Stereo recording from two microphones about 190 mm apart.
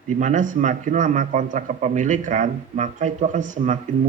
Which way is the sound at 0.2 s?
40° right (ahead or behind).